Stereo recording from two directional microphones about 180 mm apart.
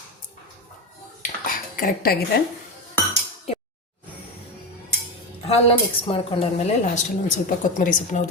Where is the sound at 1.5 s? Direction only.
50° left (ahead or behind).